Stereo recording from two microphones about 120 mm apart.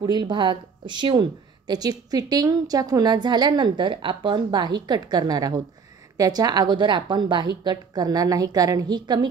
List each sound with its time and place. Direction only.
0.0 s a woman's voice: 40° right (ahead or behind)